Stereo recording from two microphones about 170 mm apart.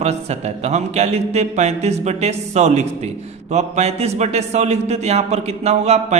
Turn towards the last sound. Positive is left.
turn(degrees=-40)  # may be behind; listen again after turning